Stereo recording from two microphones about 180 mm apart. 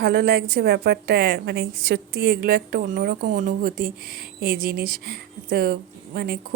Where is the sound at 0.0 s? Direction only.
55° right (ahead or behind).